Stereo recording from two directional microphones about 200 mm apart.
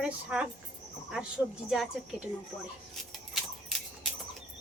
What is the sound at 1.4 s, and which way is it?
Speech, 5° left (ahead or behind).